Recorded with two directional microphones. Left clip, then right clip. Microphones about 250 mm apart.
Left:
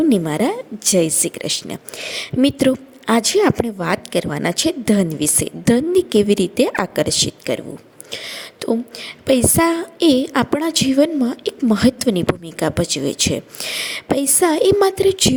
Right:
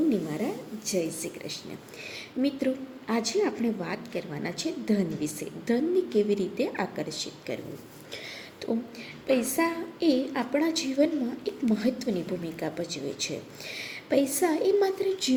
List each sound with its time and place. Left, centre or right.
0.1 s a woman's voice: left
8.1 s a sound: left
9.2 s a woman's voice: left